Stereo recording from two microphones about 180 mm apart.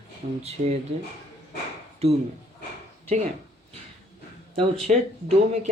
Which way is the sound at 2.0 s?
35° right (ahead or behind).